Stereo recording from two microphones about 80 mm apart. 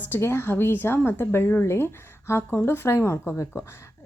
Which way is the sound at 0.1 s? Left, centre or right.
Left.